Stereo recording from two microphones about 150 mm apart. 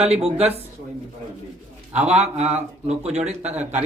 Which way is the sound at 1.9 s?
10° right (ahead or behind).